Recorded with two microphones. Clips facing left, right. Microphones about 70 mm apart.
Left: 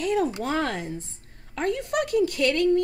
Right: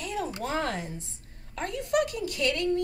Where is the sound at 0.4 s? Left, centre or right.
Left.